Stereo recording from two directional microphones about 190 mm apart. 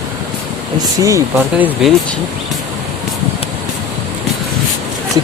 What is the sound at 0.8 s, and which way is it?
Speech, 15° right (ahead or behind).